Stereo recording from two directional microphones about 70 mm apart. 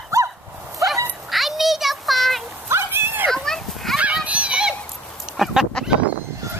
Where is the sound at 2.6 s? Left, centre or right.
Right.